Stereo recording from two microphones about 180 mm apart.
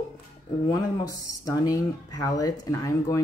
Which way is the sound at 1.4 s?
20° left (ahead or behind).